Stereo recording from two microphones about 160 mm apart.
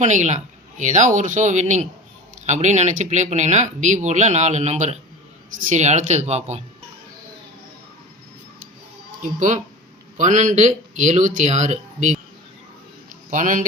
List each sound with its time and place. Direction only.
0.0 s speech: 50° right (ahead or behind)
9.2 s speech: 50° right (ahead or behind)
13.3 s speech: 55° right (ahead or behind)